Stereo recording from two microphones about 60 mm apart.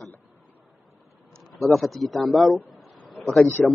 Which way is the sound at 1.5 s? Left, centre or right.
Centre.